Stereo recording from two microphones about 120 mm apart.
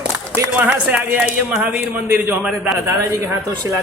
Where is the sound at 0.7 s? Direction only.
10° right (ahead or behind).